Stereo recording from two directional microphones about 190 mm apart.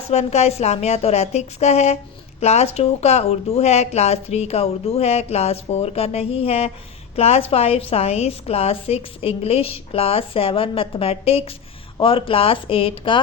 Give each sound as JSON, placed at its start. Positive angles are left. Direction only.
{"t": 0.1, "sound": "a woman's voice", "side_deg": 35}